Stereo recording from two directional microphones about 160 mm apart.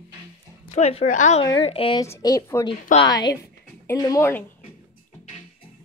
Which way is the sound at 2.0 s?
20° left (ahead or behind).